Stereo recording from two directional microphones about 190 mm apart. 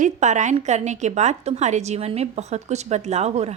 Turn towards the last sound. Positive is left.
turn(degrees=-35)  # may be behind; listen again after turning